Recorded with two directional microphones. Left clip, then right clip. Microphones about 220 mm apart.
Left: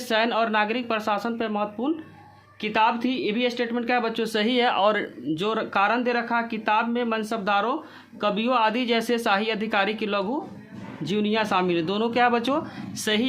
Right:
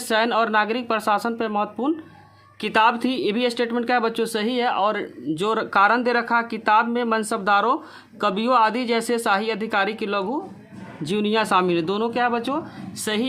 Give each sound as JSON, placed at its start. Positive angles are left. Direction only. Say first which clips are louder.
{"t": 0.1, "sound": "speech", "louder": "right 3 dB", "side_deg": -25}